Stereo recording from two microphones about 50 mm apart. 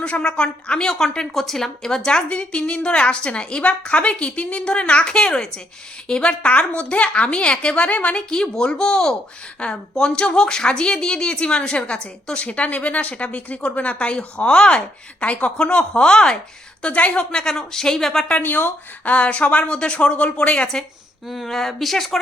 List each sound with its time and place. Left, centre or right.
0.0 s a woman's voice: left
16.8 s a woman's voice: left; by 18.3 s centre
18.4 s a woman's voice: left
21.2 s speech: centre